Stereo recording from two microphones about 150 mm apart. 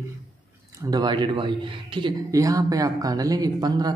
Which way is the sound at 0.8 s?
30° right (ahead or behind).